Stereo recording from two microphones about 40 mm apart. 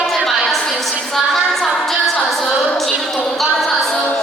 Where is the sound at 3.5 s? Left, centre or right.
Centre.